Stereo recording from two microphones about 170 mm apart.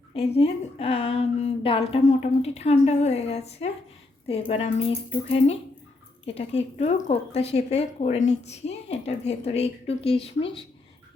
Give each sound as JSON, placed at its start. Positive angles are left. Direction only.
{"t": 0.1, "sound": "speech", "side_deg": 35}
{"t": 6.2, "sound": "speech", "side_deg": 40}